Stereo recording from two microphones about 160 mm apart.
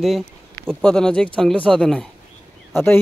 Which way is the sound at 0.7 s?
5° left (ahead or behind).